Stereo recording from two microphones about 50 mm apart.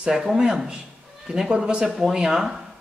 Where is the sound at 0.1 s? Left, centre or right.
Centre.